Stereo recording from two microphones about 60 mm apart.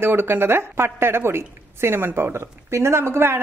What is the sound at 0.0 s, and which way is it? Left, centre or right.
Speech, right.